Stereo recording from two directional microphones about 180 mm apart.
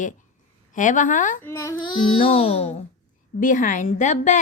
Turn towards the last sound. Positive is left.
turn(degrees=40)  # may be behind; listen again after turning